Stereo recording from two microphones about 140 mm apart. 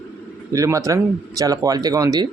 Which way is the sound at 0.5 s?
20° right (ahead or behind).